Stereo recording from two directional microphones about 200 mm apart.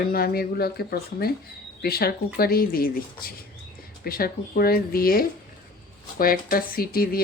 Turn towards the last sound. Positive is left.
turn(degrees=45)  # may be behind; listen again after turning